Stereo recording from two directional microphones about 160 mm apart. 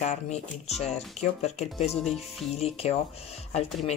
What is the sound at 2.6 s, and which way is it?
Speech, 40° left (ahead or behind).